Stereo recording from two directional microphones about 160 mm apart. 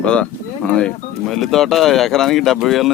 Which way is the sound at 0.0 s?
5° left (ahead or behind).